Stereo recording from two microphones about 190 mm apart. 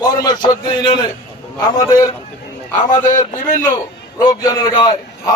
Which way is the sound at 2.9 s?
40° left (ahead or behind).